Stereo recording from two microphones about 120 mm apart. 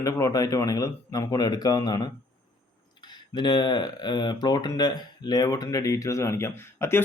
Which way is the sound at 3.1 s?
35° left (ahead or behind).